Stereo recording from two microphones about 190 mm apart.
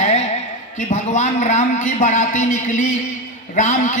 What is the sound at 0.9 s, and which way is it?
A man's voice, 40° left (ahead or behind).